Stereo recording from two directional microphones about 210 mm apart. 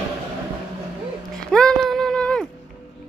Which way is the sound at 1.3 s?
5° left (ahead or behind).